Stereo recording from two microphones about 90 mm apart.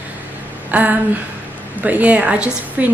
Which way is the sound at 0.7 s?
15° right (ahead or behind).